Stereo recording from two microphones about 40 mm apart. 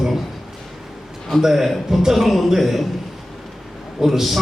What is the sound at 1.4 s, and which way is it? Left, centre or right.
A man's voice, centre.